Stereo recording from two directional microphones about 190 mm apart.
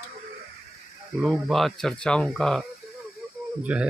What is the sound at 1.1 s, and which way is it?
Speech, centre (ahead or behind).